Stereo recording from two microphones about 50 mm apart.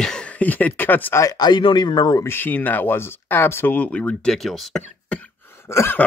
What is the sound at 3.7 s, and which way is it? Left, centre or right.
Speech, left.